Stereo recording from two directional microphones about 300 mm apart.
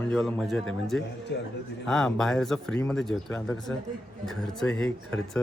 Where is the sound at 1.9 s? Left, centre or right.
Centre.